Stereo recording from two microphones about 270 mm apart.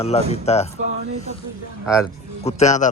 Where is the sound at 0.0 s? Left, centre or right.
Left.